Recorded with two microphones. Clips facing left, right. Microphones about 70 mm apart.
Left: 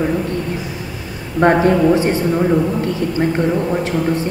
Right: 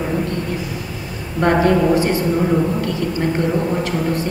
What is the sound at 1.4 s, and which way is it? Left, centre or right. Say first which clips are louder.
Speech: left 2 dB; left.